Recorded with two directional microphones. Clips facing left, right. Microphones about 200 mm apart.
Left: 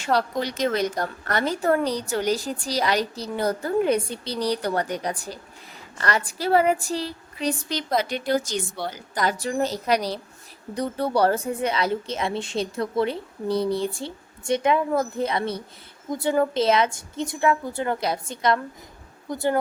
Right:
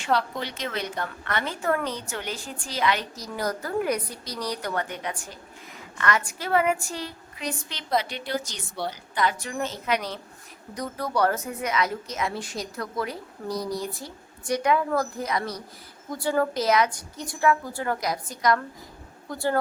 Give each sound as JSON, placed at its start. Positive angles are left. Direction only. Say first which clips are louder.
{"t": 0.0, "sound": "a woman's voice", "louder": "left 3 dB", "side_deg": 40}
{"t": 9.2, "sound": "a woman's voice", "louder": "left 4 dB", "side_deg": 35}